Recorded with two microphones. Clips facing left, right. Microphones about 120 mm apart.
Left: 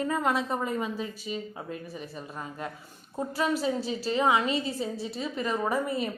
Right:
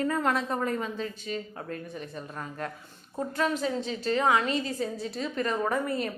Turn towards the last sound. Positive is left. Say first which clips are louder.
# even
turn(degrees=5)  # may be behind; listen again after turning